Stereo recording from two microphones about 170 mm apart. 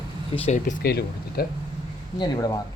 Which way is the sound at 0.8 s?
65° left (ahead or behind).